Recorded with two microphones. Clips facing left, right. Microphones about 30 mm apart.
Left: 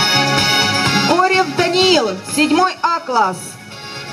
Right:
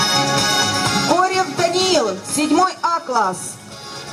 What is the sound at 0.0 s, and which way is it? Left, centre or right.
Music, left.